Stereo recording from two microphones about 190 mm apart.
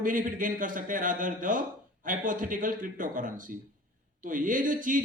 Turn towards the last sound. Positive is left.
turn(degrees=-45)  # may be behind; listen again after turning